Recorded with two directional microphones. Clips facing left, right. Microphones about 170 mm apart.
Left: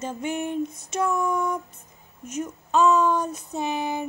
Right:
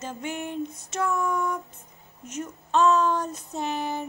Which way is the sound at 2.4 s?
10° left (ahead or behind).